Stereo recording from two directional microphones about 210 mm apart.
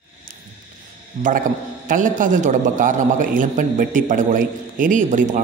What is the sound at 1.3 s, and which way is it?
A man's voice, 40° right (ahead or behind).